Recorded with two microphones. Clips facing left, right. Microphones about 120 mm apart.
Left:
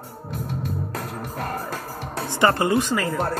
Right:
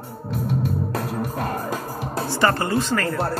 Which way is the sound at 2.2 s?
20° left (ahead or behind).